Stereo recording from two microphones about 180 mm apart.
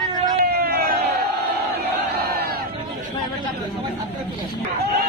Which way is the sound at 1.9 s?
60° right (ahead or behind).